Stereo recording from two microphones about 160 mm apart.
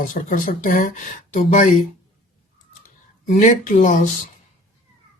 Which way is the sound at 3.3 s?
55° left (ahead or behind).